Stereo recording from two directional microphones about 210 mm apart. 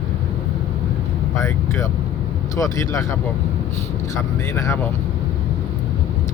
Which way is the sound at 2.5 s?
15° left (ahead or behind).